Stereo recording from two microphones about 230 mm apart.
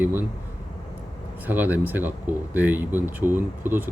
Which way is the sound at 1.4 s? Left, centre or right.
Centre.